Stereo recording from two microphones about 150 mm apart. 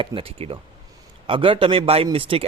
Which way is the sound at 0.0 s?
35° right (ahead or behind).